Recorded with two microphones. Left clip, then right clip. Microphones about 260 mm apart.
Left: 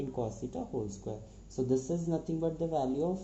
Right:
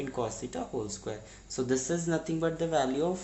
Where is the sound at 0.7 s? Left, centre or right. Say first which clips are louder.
Right 2 dB; right.